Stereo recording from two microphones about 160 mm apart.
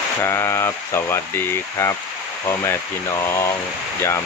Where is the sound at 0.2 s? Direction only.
15° left (ahead or behind).